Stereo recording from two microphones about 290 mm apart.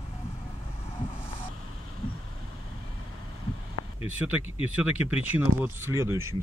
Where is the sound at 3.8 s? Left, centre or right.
Left.